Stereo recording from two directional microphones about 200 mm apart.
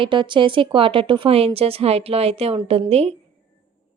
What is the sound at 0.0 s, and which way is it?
A woman's voice, 25° right (ahead or behind).